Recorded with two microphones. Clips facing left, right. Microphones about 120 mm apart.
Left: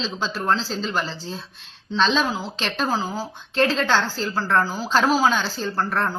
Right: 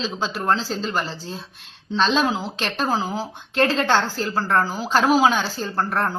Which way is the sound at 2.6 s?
Centre (ahead or behind).